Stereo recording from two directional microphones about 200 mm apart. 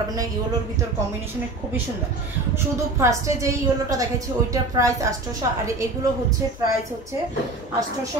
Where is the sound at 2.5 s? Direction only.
15° right (ahead or behind).